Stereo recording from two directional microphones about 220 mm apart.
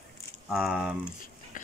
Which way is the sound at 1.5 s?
35° left (ahead or behind).